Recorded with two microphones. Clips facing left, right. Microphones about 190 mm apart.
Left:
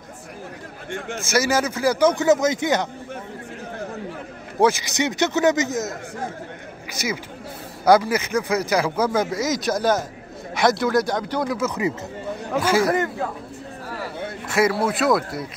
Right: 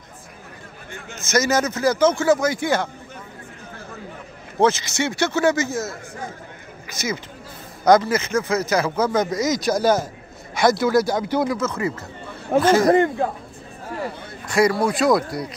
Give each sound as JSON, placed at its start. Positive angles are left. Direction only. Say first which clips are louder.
{"t": 1.2, "sound": "speech", "louder": "right 1 dB", "side_deg": 10}
{"t": 4.6, "sound": "speech", "louder": "even", "side_deg": 10}
{"t": 11.5, "sound": "speech", "louder": "left 1 dB", "side_deg": 15}
{"t": 12.8, "sound": "speech", "louder": "right 5 dB", "side_deg": -30}
{"t": 14.5, "sound": "speech", "louder": "right 2 dB", "side_deg": 5}